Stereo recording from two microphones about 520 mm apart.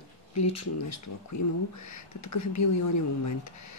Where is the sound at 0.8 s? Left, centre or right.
Left.